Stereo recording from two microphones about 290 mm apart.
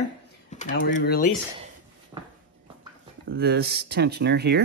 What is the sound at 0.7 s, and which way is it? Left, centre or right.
Speech, left.